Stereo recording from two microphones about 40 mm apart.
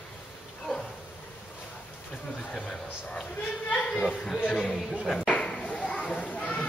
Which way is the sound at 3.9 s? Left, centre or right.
Centre.